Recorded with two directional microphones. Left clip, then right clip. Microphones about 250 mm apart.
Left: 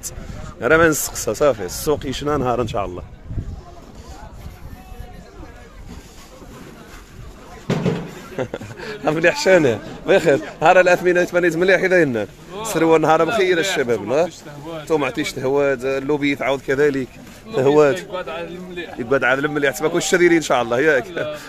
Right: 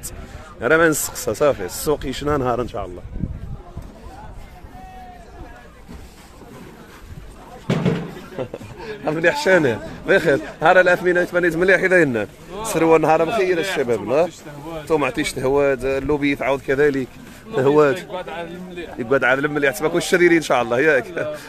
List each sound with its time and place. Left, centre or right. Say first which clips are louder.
0.6 s a man's voice: left 1 dB; centre
8.4 s a man's voice: left 3 dB; centre
17.9 s a man's voice: left 2 dB; centre
18.9 s a man's voice: even; centre